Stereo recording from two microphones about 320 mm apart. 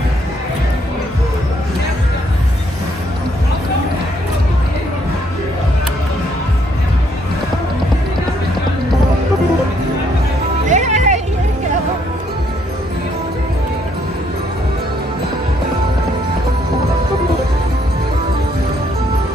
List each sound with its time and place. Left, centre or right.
10.7 s music: right